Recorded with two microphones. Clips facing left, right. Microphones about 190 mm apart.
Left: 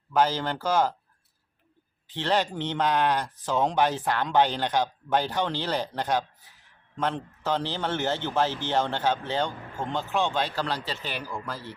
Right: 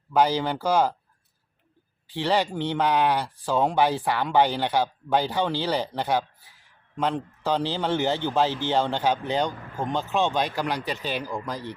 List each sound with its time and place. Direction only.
0.1 s speech: 10° right (ahead or behind)
2.0 s speech: 10° right (ahead or behind)